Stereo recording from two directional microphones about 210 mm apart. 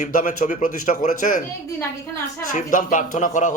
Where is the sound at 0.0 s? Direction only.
40° left (ahead or behind).